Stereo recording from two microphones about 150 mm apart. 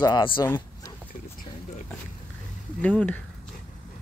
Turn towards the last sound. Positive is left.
turn(degrees=10)  # may be behind; listen again after turning